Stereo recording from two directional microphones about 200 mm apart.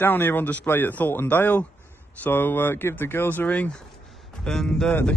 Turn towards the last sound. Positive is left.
turn(degrees=5)  # may be behind; listen again after turning